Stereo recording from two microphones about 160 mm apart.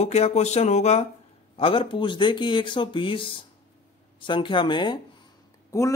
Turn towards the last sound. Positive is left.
turn(degrees=20)  # may be behind; listen again after turning